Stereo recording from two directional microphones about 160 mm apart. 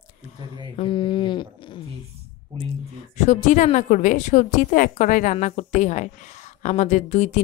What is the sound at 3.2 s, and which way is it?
A woman's voice, 45° left (ahead or behind).